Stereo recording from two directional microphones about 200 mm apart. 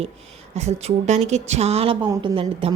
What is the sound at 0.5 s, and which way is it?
A woman's voice, 35° right (ahead or behind).